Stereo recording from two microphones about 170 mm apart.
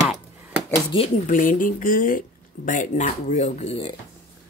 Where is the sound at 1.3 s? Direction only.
50° left (ahead or behind); by 4.0 s 35° left (ahead or behind).